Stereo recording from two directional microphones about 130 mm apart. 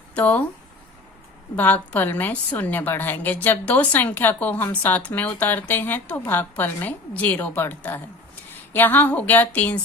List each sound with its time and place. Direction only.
0.1 s speech: 10° left (ahead or behind)
1.5 s a woman's voice: 15° left (ahead or behind)